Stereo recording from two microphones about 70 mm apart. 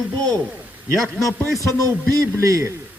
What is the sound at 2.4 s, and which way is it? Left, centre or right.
Speech, right.